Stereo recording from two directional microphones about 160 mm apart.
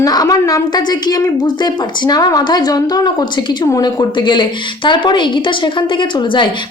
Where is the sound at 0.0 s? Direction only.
25° left (ahead or behind).